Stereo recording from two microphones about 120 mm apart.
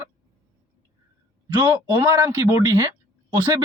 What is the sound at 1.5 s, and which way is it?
Speech, 35° right (ahead or behind).